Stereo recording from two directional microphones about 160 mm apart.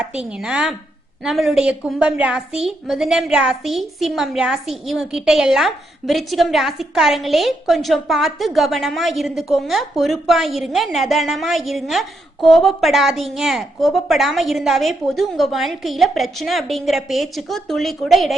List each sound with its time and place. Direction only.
0.0 s a woman's voice: 5° right (ahead or behind)